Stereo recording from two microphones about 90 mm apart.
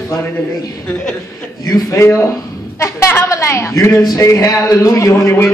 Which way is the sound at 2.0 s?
30° left (ahead or behind).